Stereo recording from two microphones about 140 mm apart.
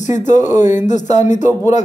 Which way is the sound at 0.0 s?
60° left (ahead or behind).